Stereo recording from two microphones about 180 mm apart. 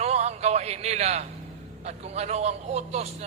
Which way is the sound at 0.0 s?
35° right (ahead or behind).